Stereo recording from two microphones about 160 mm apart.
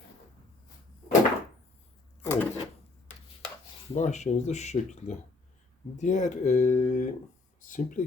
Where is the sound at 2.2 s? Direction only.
15° left (ahead or behind).